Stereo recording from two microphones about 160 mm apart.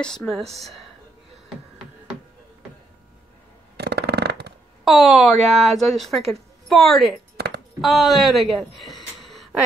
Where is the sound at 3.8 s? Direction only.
90° right.